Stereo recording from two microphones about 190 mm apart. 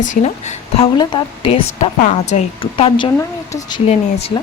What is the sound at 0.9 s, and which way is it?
A woman's voice, 25° left (ahead or behind).